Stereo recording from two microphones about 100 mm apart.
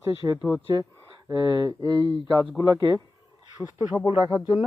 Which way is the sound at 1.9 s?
60° left (ahead or behind).